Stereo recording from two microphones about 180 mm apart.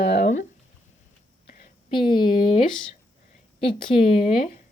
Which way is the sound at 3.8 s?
30° left (ahead or behind).